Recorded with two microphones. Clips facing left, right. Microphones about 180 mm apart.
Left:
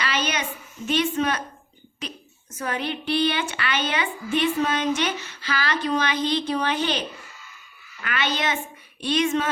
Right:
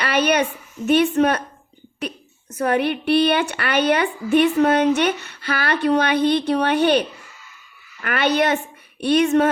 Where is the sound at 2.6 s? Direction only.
60° right (ahead or behind).